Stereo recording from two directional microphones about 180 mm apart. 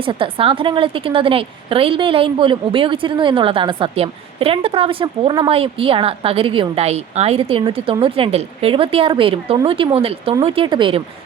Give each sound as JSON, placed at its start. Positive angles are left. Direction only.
{"t": 0.0, "sound": "a woman's voice", "side_deg": -30}